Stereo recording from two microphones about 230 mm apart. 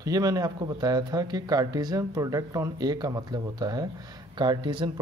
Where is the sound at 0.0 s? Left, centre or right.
Centre.